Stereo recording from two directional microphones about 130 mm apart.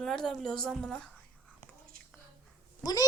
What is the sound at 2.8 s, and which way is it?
Speech, 30° left (ahead or behind).